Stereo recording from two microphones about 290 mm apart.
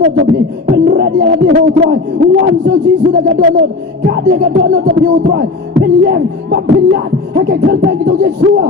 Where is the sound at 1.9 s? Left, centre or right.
Right.